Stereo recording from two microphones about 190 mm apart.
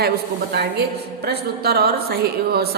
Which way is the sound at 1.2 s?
55° right (ahead or behind).